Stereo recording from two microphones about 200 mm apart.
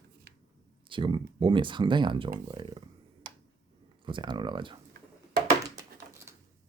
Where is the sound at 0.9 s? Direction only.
25° right (ahead or behind).